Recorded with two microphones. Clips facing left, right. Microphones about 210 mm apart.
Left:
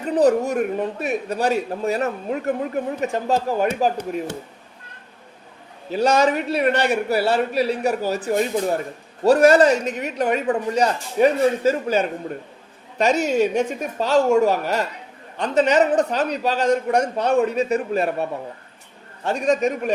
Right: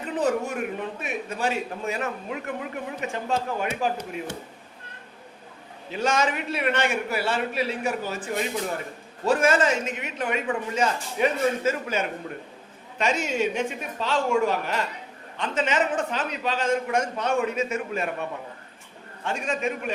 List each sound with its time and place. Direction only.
0.2 s a man's voice: 40° left (ahead or behind)
5.9 s a man's voice: 35° left (ahead or behind)